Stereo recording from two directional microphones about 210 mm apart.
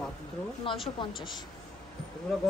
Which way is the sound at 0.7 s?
25° left (ahead or behind).